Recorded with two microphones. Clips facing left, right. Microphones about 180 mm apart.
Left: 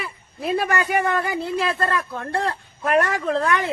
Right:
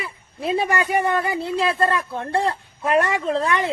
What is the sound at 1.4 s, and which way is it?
Speech, 25° right (ahead or behind).